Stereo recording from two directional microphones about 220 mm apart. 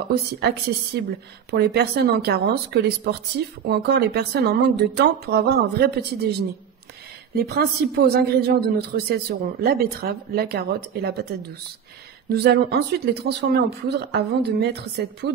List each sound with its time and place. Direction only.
0.1 s speech: 50° right (ahead or behind)
7.3 s speech: 45° right (ahead or behind)